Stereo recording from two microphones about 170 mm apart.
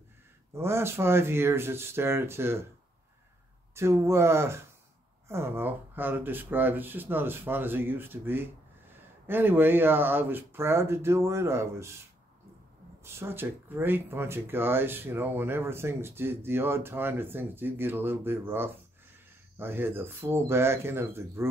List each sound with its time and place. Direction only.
0.6 s speech: 15° right (ahead or behind)
3.7 s speech: 15° right (ahead or behind)
13.0 s speech: 15° right (ahead or behind)